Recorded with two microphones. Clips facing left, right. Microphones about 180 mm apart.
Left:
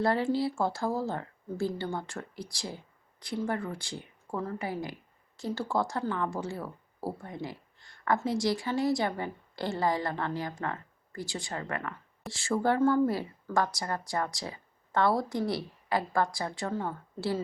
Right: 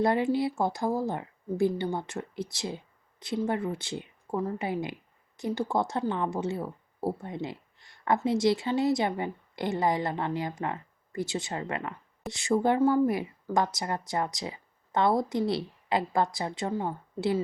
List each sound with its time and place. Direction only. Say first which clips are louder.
0.0 s speech: right 2 dB; 20° right (ahead or behind)